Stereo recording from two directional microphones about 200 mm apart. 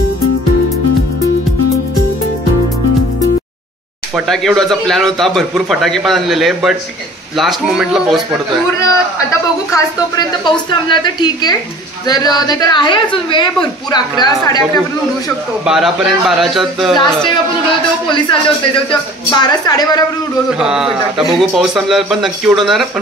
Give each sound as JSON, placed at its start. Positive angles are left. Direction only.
{"t": 4.3, "sound": "a man's voice", "side_deg": 0}
{"t": 9.7, "sound": "a woman's voice", "side_deg": 20}
{"t": 15.6, "sound": "a man's voice", "side_deg": 0}
{"t": 16.9, "sound": "a woman's voice", "side_deg": 25}
{"t": 20.5, "sound": "a man's voice", "side_deg": -5}